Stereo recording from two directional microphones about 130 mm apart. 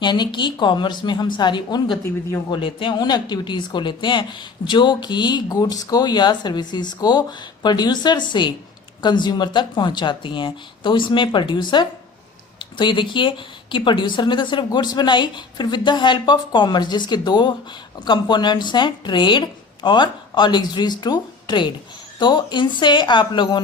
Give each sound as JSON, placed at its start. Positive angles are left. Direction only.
{"t": 0.0, "sound": "speech", "side_deg": 35}